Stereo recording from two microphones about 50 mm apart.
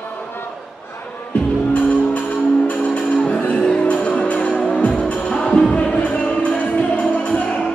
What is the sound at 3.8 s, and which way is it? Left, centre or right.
Music, left.